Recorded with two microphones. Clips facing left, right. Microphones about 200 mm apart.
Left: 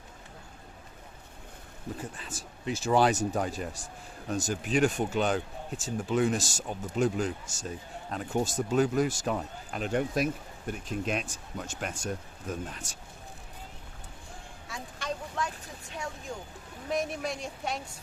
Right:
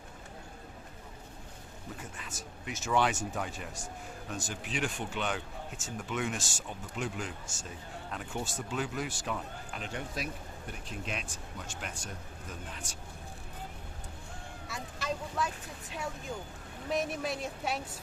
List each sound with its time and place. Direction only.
2.0 s speech: 30° left (ahead or behind)
14.7 s a woman's voice: 5° right (ahead or behind)